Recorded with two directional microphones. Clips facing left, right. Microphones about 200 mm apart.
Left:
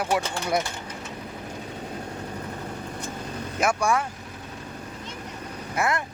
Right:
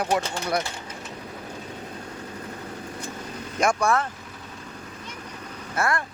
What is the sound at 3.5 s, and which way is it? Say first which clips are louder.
Speech: right 1 dB; 10° left (ahead or behind).